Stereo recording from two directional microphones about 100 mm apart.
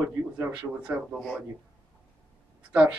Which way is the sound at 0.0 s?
20° right (ahead or behind).